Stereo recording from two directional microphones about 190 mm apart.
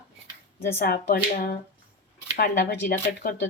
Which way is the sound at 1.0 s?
45° left (ahead or behind).